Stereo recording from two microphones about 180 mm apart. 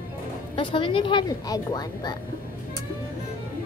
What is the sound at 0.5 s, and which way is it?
Speech, 30° left (ahead or behind).